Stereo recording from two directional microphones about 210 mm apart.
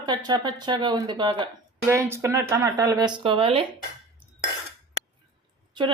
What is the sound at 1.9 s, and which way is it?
Speech, 15° right (ahead or behind).